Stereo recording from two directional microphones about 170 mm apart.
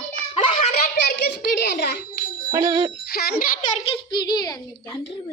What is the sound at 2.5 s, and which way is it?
Speech, 20° right (ahead or behind).